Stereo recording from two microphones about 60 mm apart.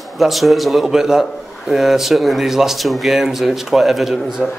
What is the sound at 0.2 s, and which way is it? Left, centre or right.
Speech, centre.